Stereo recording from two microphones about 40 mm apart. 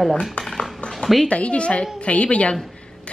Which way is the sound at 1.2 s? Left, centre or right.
Left.